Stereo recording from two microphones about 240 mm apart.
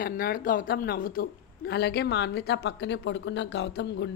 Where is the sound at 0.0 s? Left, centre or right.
Left.